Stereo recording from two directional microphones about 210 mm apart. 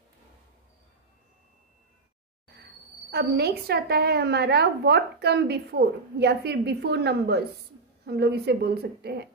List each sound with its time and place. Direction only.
3.1 s a woman's voice: 50° right (ahead or behind)